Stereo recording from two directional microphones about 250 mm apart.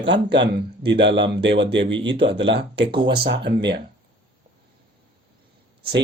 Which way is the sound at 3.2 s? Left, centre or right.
Right.